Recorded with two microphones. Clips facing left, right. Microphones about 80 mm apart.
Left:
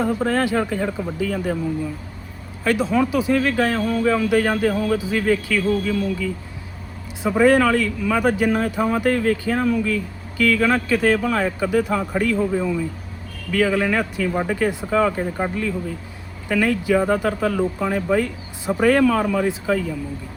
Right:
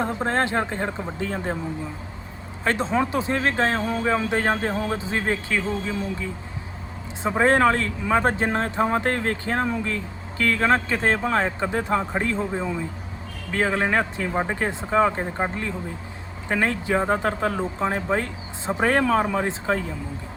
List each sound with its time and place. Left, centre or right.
0.0 s speech: right